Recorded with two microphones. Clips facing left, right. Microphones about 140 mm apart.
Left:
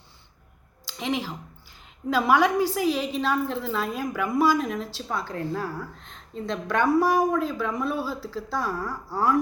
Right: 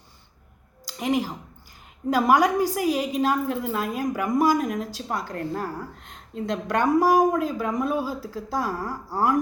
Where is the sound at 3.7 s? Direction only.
45° right (ahead or behind).